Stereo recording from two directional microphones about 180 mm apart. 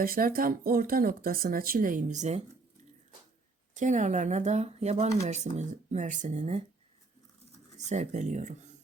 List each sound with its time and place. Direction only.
0.0 s speech: 50° right (ahead or behind)
3.8 s speech: 45° right (ahead or behind)
7.9 s speech: 40° right (ahead or behind)